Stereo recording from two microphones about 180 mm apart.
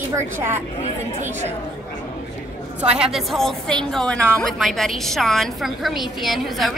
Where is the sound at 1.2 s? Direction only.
40° right (ahead or behind).